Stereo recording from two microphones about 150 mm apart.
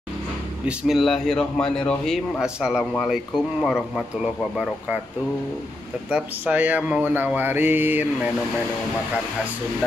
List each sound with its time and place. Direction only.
0.7 s a man's voice: centre (ahead or behind)
6.0 s speech: 10° right (ahead or behind)